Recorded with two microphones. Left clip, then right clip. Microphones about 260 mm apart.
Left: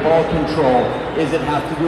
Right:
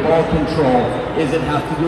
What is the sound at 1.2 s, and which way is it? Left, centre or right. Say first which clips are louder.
Speech: left 1 dB; left.